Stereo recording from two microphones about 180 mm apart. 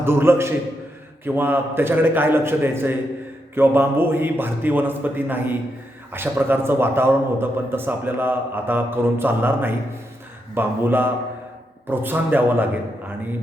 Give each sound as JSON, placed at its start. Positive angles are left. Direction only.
{"t": 0.0, "sound": "a man's voice", "side_deg": -15}